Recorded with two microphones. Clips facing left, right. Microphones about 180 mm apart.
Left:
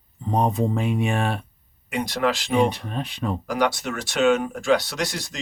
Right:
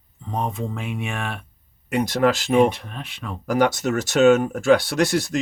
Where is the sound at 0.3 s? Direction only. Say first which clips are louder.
Left 5 dB; 40° left (ahead or behind).